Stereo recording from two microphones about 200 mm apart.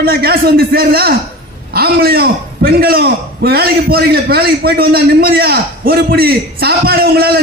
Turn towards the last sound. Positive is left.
turn(degrees=-50)  # may be behind; listen again after turning